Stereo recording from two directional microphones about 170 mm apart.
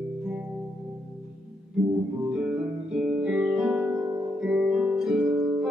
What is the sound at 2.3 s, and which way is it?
Guitar, 5° right (ahead or behind).